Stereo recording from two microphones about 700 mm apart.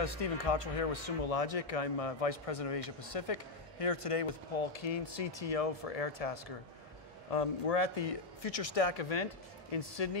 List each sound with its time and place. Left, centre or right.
0.0 s a man's voice: left